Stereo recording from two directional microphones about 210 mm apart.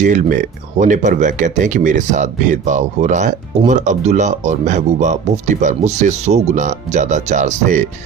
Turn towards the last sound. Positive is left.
turn(degrees=-35)  # may be behind; listen again after turning